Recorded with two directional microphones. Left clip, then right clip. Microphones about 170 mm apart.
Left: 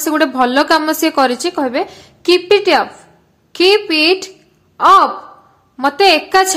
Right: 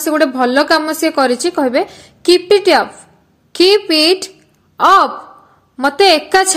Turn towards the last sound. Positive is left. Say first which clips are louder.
# even
turn(degrees=-20)  # may be behind; listen again after turning